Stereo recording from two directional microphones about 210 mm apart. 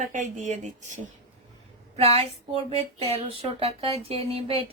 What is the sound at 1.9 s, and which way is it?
Speech, 30° right (ahead or behind).